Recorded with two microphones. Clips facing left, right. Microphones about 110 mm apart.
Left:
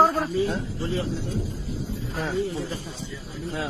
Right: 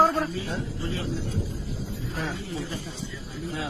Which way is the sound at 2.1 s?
40° left (ahead or behind).